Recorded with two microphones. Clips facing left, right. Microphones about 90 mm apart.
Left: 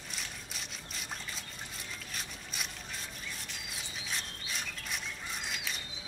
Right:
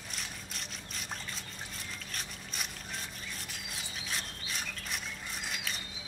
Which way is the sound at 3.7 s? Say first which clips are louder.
Right 1 dB; centre (ahead or behind).